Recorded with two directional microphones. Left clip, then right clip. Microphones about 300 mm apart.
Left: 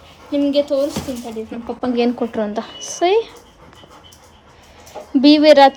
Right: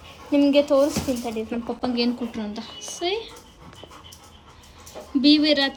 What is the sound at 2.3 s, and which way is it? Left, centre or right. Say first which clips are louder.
Speech: left 11 dB; centre.